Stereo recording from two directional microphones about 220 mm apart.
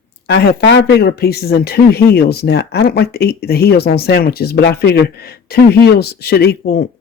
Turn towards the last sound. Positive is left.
turn(degrees=45)  # may be behind; listen again after turning